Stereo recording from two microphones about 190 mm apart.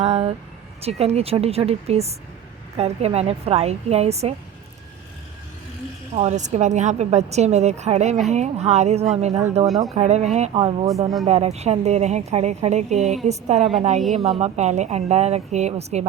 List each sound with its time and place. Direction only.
0.0 s a sound: 30° right (ahead or behind)
0.8 s a woman's voice: 35° right (ahead or behind)
6.1 s a woman's voice: 35° right (ahead or behind)